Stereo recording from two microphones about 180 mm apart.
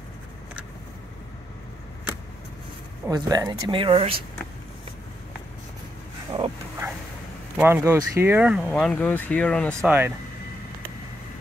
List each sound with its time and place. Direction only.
3.1 s speech: 20° right (ahead or behind)
7.5 s speech: 15° right (ahead or behind)
8.6 s speech: 5° left (ahead or behind)
9.8 s speech: 10° right (ahead or behind)